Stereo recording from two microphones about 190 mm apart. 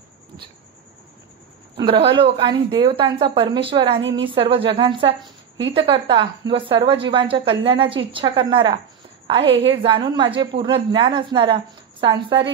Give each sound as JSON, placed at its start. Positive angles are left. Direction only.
{"t": 1.8, "sound": "a woman's voice", "side_deg": -25}